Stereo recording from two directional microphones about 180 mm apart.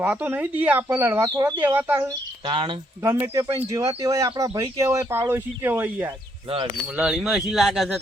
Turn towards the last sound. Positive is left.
turn(degrees=0)  # may be behind; listen again after turning